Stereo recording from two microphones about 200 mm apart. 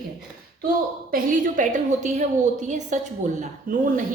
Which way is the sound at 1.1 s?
45° right (ahead or behind).